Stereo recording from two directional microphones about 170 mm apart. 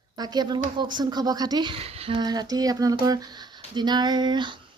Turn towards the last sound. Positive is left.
turn(degrees=-25)  # may be behind; listen again after turning